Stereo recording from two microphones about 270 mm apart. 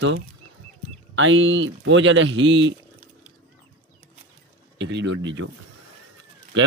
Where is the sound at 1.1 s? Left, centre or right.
Right.